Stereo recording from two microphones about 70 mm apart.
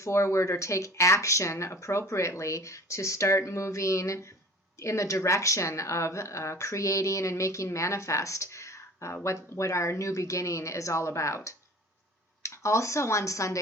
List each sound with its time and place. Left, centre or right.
0.0 s speech: left